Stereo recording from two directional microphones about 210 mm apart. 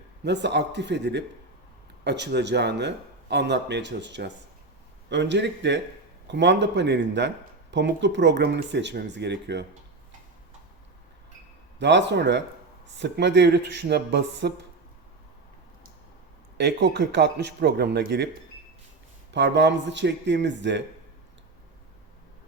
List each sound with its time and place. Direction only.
0.3 s speech: 55° right (ahead or behind)
11.8 s speech: 55° right (ahead or behind)
16.6 s a man's voice: 55° right (ahead or behind)
19.3 s speech: 55° right (ahead or behind)